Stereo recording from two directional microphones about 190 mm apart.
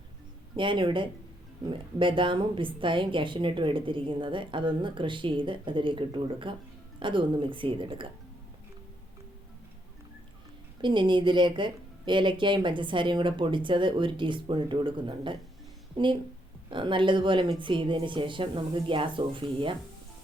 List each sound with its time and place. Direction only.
0.5 s a woman's voice: 25° right (ahead or behind)
10.8 s a woman's voice: 25° right (ahead or behind)